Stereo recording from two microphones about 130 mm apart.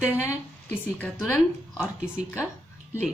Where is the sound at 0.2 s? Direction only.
15° left (ahead or behind).